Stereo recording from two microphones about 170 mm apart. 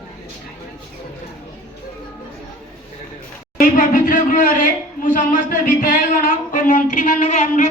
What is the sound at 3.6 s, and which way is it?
Speech, 55° left (ahead or behind).